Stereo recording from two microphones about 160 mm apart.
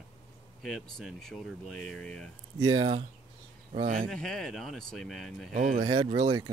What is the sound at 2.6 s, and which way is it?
Speech, 30° right (ahead or behind).